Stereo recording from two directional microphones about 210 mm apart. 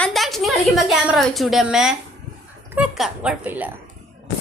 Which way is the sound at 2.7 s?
5° right (ahead or behind).